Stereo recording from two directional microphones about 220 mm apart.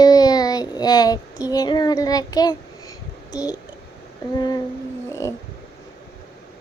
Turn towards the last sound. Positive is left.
turn(degrees=15)  # may be behind; listen again after turning